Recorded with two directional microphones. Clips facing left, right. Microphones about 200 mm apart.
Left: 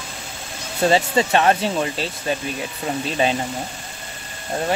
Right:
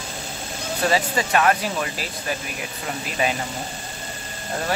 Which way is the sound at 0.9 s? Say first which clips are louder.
Left 4 dB; 25° left (ahead or behind).